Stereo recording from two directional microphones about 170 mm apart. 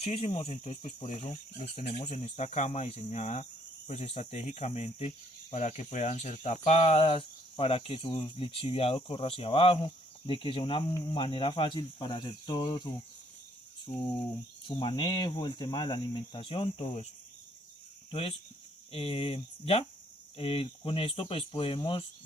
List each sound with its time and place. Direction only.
0.0 s speech: 35° left (ahead or behind)
14.8 s speech: 25° left (ahead or behind)
18.1 s speech: 30° left (ahead or behind)